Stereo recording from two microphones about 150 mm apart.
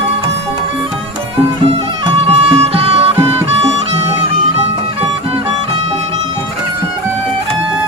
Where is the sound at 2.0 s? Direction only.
40° right (ahead or behind).